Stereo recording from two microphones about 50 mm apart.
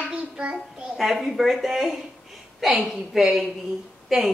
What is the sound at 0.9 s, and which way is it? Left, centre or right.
A woman's voice, centre.